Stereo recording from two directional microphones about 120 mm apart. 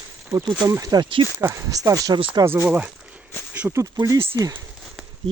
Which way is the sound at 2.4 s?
20° right (ahead or behind).